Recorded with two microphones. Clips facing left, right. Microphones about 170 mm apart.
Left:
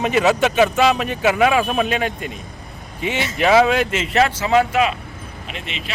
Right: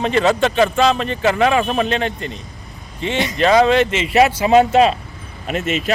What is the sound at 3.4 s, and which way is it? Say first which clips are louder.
Speech: right 2 dB; 5° left (ahead or behind).